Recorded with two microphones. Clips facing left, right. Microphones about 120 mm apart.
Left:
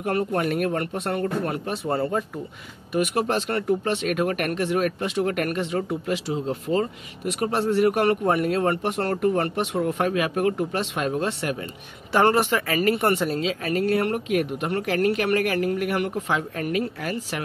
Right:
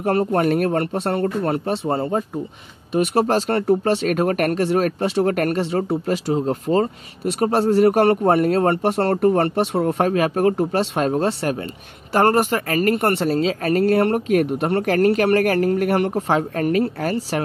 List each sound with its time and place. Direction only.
0.0 s speech: 35° right (ahead or behind)